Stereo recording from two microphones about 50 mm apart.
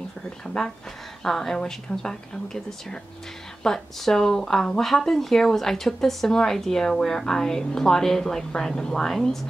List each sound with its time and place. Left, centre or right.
0.5 s speech: centre